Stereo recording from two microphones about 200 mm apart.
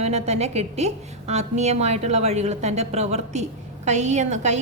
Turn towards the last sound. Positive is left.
turn(degrees=-35)  # may be behind; listen again after turning